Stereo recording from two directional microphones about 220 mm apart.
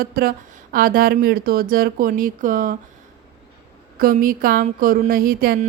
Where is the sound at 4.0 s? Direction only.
40° right (ahead or behind).